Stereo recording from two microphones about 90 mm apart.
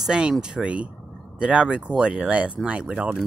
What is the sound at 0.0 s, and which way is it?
Speech, 5° right (ahead or behind).